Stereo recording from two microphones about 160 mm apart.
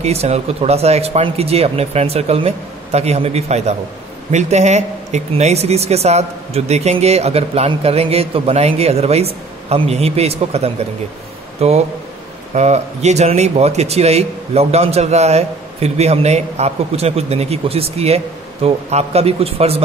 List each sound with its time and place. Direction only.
0.0 s speech: 40° right (ahead or behind)